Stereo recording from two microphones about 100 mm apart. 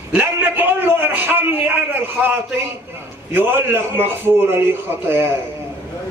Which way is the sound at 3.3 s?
20° right (ahead or behind).